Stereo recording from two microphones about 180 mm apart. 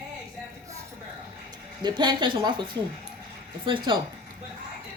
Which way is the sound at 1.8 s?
25° right (ahead or behind).